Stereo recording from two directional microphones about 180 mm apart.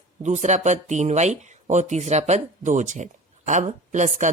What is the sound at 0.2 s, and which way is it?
Speech, 40° right (ahead or behind).